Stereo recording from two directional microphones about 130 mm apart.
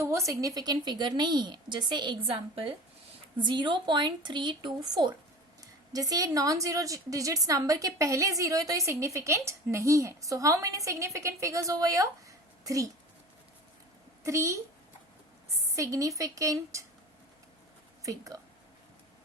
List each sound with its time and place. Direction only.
0.0 s a woman's voice: 25° right (ahead or behind)
14.3 s a woman's voice: 25° right (ahead or behind)
15.7 s a woman's voice: 25° right (ahead or behind)
18.3 s speech: 30° right (ahead or behind)